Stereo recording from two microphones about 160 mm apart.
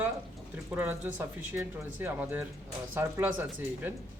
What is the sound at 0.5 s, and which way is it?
A man's voice, 10° right (ahead or behind).